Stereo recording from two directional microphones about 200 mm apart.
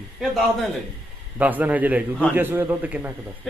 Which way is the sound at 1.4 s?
10° right (ahead or behind).